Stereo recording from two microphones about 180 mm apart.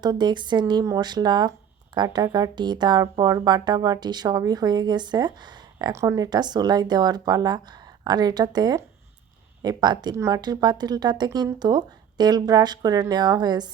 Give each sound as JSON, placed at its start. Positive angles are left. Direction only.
{"t": 0.0, "sound": "speech", "side_deg": -25}